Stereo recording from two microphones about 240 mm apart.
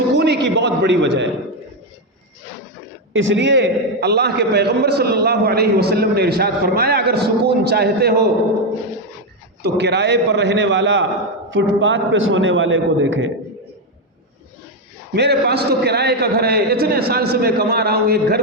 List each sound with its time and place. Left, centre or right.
0.2 s a sound: right
3.1 s a man's voice: right
9.6 s a man's voice: right
15.1 s a man's voice: right